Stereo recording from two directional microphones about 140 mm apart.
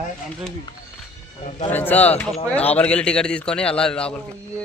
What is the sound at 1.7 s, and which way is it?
A man's voice, 15° left (ahead or behind).